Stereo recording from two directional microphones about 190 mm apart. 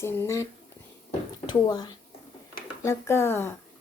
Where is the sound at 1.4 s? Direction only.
20° left (ahead or behind).